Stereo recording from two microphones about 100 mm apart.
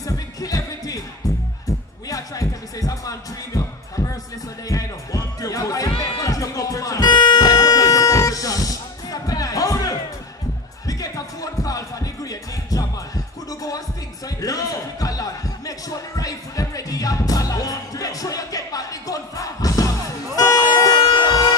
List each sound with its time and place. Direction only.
0.0 s music: 35° left (ahead or behind)
2.0 s music: 35° left (ahead or behind)
14.4 s a sound: 35° left (ahead or behind)
16.2 s music: 35° left (ahead or behind)
21.0 s train: 50° left (ahead or behind)